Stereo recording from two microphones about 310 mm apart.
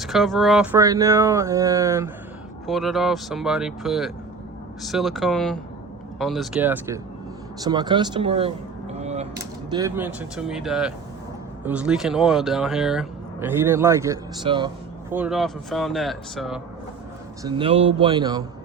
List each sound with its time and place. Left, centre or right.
0.0 s speech: centre
15.1 s speech: centre
17.4 s speech: centre